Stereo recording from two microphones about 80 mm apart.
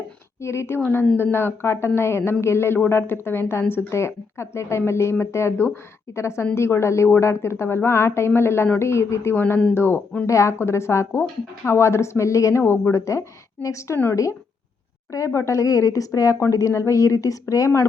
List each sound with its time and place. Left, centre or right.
0.4 s speech: left
9.3 s speech: left
10.2 s speech: left
15.1 s a woman's voice: left